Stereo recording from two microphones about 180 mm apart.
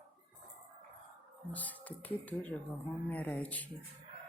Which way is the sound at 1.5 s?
10° left (ahead or behind).